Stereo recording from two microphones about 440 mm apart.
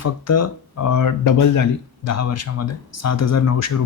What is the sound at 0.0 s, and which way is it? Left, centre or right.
Speech, left.